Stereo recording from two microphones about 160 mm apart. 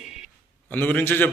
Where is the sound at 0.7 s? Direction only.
10° left (ahead or behind).